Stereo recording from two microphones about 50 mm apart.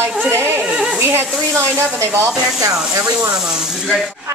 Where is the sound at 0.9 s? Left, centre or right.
Right.